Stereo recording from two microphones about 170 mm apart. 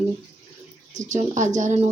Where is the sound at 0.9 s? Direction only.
45° right (ahead or behind).